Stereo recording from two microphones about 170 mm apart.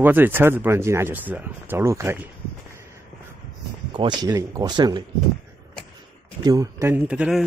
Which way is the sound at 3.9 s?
25° right (ahead or behind).